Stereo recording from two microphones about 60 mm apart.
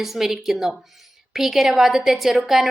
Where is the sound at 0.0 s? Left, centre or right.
Centre.